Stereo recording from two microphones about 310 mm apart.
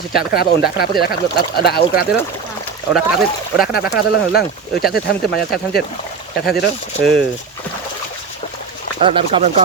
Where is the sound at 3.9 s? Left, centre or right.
Left.